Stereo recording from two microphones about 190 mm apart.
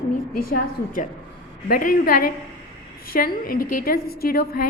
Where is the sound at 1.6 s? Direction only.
50° left (ahead or behind).